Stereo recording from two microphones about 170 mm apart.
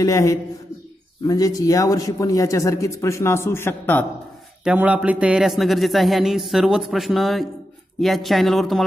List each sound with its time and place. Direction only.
0.0 s speech: 20° left (ahead or behind)
4.6 s a man's voice: 10° right (ahead or behind)